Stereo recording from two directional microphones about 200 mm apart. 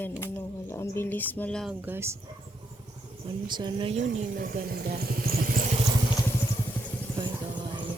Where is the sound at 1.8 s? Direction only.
10° right (ahead or behind).